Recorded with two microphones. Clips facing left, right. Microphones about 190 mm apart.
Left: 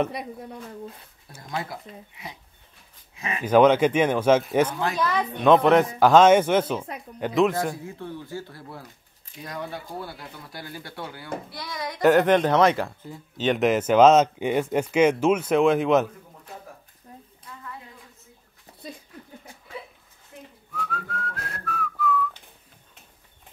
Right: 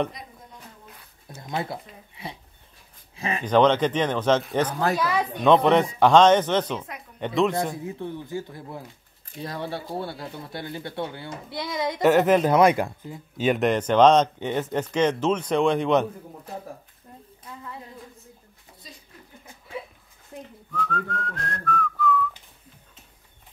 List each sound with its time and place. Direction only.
0.1 s speech: 70° left (ahead or behind)
1.5 s speech: 25° right (ahead or behind)
3.4 s speech: 10° left (ahead or behind)
4.9 s speech: 5° right (ahead or behind)
7.7 s speech: 20° right (ahead or behind)
9.4 s speech: 30° right (ahead or behind)
12.0 s speech: centre (ahead or behind)
20.7 s whistling: 5° left (ahead or behind)